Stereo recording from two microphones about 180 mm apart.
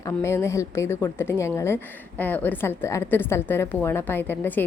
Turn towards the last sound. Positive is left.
turn(degrees=10)  # may be behind; listen again after turning